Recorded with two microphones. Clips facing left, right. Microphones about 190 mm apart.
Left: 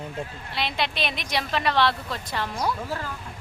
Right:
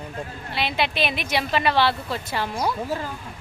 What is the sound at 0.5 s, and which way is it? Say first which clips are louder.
A woman's voice: right 4 dB; 5° right (ahead or behind).